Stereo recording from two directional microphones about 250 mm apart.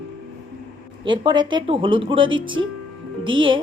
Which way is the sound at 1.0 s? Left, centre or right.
Centre.